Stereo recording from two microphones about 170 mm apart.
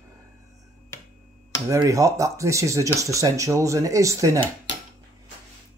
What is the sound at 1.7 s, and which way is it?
Speech, 20° right (ahead or behind).